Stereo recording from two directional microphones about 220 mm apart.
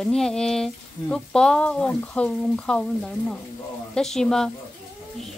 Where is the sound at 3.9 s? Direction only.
Centre (ahead or behind).